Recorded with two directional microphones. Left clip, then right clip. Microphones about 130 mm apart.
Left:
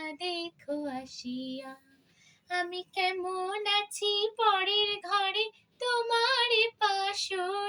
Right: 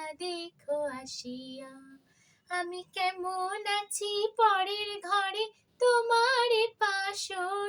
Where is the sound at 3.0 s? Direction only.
45° right (ahead or behind).